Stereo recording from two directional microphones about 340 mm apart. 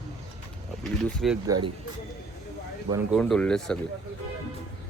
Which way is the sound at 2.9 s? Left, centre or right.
Centre.